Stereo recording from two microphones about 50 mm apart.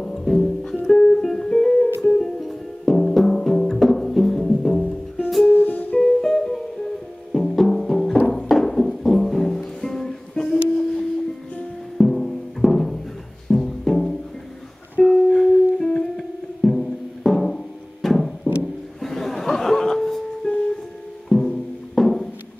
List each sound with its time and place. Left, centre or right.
0.0 s music: centre
4.8 s music: left
5.9 s music: centre
18.6 s a sound: centre
21.3 s music: centre